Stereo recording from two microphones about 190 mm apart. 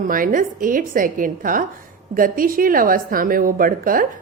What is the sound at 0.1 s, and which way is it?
A woman's voice, 45° right (ahead or behind).